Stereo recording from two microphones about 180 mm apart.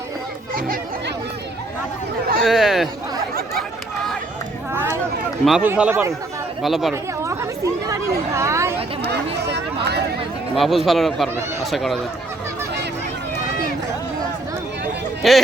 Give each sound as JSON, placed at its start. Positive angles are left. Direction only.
{"t": 0.5, "sound": "chatter", "side_deg": -50}
{"t": 2.4, "sound": "chatter", "side_deg": 0}
{"t": 4.7, "sound": "a sound", "side_deg": -10}
{"t": 5.5, "sound": "a man's voice", "side_deg": -5}
{"t": 6.6, "sound": "a man's voice", "side_deg": 0}
{"t": 6.9, "sound": "chatter", "side_deg": -15}
{"t": 8.3, "sound": "a sound", "side_deg": -15}
{"t": 9.0, "sound": "a sound", "side_deg": -70}
{"t": 10.5, "sound": "a man's voice", "side_deg": 0}
{"t": 15.2, "sound": "a man's voice", "side_deg": 0}